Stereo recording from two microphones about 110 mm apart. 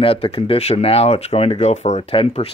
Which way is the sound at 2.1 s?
65° left (ahead or behind).